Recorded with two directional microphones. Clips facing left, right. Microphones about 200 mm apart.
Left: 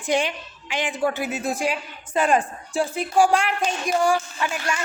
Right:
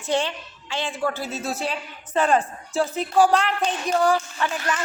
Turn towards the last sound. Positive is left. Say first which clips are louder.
# right 1 dB
turn(degrees=10)  # may be behind; listen again after turning